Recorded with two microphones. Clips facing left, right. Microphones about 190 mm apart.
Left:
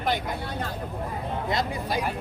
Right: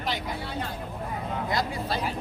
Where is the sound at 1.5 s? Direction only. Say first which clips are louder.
Left 2 dB; 20° left (ahead or behind).